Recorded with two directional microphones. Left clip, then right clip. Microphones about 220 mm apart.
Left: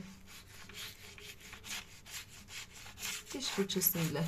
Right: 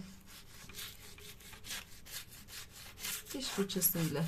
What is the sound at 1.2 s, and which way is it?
Wood, 15° right (ahead or behind).